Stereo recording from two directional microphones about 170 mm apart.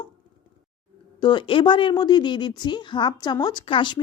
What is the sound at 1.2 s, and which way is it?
A woman's voice, 30° left (ahead or behind).